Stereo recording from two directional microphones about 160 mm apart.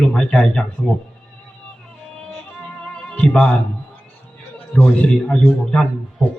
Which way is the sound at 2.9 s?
5° left (ahead or behind).